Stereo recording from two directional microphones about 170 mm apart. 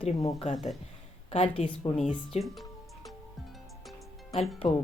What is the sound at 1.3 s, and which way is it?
Speech, 35° left (ahead or behind).